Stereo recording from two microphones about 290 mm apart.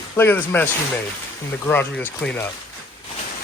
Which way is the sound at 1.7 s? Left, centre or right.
Centre.